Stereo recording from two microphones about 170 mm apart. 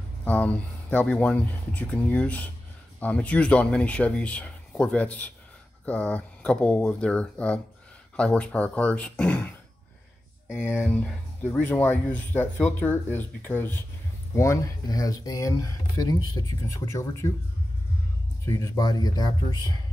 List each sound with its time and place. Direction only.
0.2 s speech: 10° left (ahead or behind)
10.9 s speech: 5° left (ahead or behind)
18.4 s speech: 15° left (ahead or behind)